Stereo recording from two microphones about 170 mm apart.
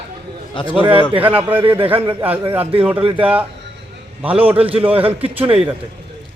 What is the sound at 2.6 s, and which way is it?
Speech, 35° right (ahead or behind).